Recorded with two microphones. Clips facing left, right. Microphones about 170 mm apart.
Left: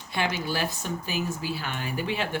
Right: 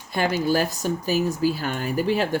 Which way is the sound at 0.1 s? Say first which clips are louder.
Right 7 dB; 40° right (ahead or behind).